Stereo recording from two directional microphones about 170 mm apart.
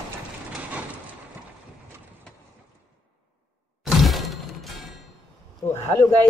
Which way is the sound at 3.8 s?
Centre (ahead or behind).